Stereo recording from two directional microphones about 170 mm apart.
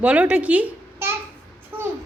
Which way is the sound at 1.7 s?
15° right (ahead or behind).